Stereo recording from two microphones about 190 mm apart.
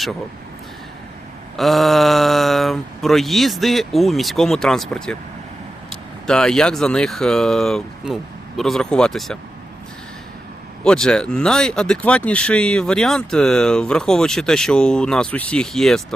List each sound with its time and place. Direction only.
1.5 s speech: centre (ahead or behind)
10.8 s speech: 5° left (ahead or behind)